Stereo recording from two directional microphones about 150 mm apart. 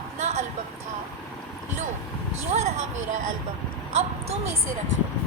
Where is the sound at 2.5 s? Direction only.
45° right (ahead or behind).